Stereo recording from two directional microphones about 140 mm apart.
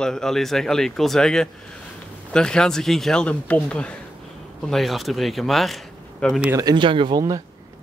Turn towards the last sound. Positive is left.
turn(degrees=-30)  # may be behind; listen again after turning